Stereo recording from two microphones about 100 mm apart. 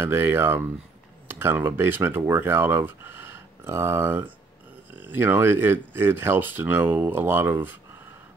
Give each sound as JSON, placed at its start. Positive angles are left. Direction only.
{"t": 0.0, "sound": "speech", "side_deg": -20}